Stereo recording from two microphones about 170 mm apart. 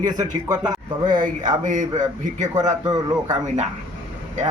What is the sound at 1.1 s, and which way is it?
A man's voice, 50° right (ahead or behind).